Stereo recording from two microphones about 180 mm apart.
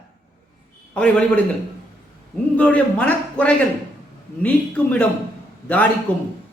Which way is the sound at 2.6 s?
10° left (ahead or behind).